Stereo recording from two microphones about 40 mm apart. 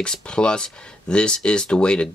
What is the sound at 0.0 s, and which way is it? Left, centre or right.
Speech, left.